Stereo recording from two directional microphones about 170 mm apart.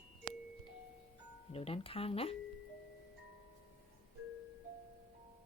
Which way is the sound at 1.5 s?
35° left (ahead or behind).